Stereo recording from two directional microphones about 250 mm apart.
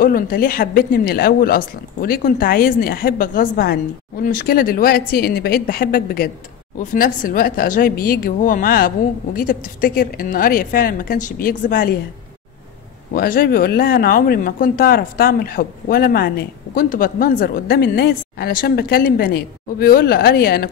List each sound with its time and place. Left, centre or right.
0.0 s speech: left
13.1 s speech: left